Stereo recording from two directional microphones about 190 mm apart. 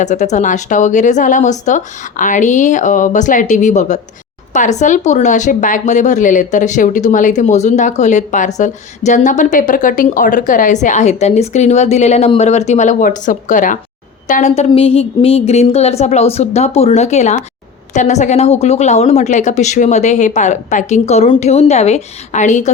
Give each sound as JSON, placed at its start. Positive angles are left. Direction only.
{"t": 0.0, "sound": "speech", "side_deg": 40}